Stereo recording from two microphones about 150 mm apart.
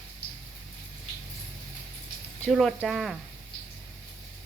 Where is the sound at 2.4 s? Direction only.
Centre (ahead or behind).